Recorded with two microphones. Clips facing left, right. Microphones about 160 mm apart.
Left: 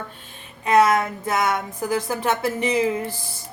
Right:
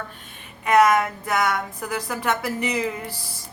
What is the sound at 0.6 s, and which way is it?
A woman's voice, 30° left (ahead or behind).